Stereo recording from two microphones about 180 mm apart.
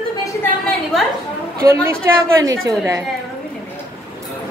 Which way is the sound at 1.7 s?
15° right (ahead or behind).